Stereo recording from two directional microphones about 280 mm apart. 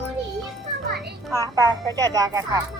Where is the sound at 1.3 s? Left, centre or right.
Centre.